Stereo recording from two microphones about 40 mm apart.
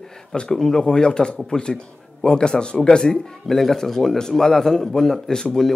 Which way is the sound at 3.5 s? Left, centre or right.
Centre.